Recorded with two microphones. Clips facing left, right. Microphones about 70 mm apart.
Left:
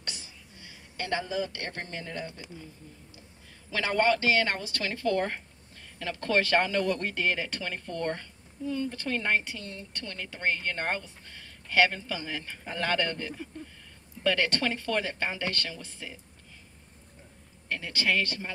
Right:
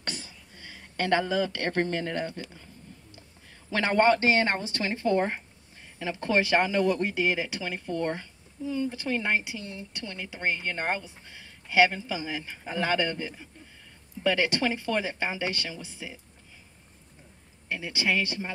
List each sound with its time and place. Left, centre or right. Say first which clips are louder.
0.0 s a sound: right 5 dB; right
3.4 s a woman's voice: right 3 dB; right; by 16.2 s centre
17.6 s a woman's voice: right 1 dB; centre